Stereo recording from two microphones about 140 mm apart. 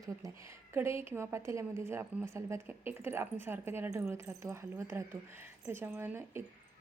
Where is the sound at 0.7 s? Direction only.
20° right (ahead or behind).